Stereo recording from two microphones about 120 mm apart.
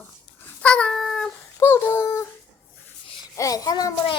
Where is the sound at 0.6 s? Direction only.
10° left (ahead or behind).